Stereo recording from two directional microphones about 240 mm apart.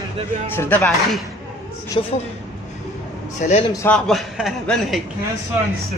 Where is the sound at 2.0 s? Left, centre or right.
Left.